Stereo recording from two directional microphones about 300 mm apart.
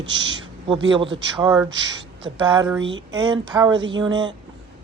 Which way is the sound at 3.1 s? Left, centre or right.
Centre.